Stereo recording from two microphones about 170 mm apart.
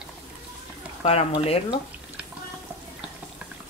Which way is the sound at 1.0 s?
35° left (ahead or behind).